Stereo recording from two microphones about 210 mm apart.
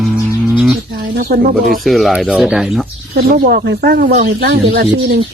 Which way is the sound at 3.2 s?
45° right (ahead or behind).